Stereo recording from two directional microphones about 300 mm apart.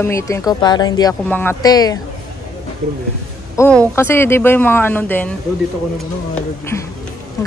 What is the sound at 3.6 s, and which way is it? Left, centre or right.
A woman's voice, centre.